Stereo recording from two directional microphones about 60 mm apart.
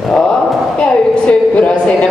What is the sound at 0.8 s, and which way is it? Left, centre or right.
A woman's voice, centre.